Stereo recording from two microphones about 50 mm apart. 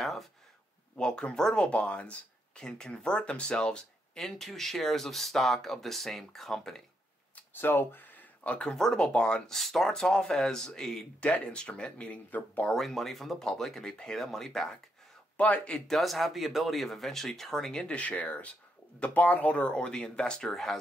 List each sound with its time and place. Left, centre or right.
0.0 s a sound: centre
0.9 s speech: centre
2.5 s speech: centre
7.5 s a sound: left
8.7 s speech: centre
9.5 s speech: centre
11.1 s speech: left
12.3 s speech: left
12.7 s speech: centre
15.3 s speech: left
15.9 s speech: centre
17.8 s speech: left; by 20.7 s centre